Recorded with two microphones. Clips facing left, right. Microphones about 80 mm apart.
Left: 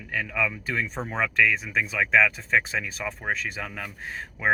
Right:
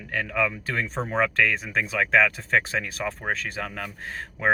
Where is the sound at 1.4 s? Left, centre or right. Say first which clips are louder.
Even; right.